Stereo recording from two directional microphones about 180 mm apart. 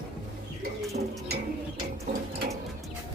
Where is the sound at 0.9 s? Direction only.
50° right (ahead or behind).